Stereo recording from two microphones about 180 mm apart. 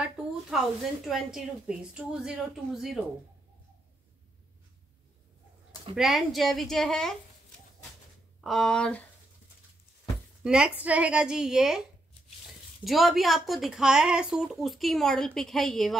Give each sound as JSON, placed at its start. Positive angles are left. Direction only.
{"t": 0.2, "sound": "a sound", "side_deg": -5}
{"t": 1.0, "sound": "a woman's voice", "side_deg": 0}
{"t": 5.9, "sound": "a woman's voice", "side_deg": 0}
{"t": 8.5, "sound": "a woman's voice", "side_deg": 0}
{"t": 10.4, "sound": "a woman's voice", "side_deg": -5}